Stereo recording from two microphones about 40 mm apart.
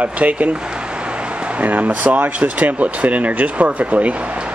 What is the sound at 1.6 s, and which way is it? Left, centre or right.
Speech, right.